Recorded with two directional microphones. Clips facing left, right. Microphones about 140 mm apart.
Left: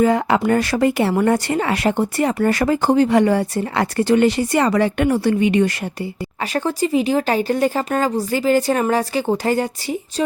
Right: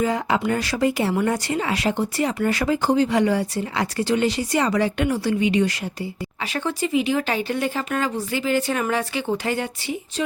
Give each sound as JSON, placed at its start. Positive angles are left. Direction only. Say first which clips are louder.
{"t": 0.0, "sound": "speech", "louder": "left 6 dB", "side_deg": 60}
{"t": 6.4, "sound": "speech", "louder": "left 5 dB", "side_deg": 40}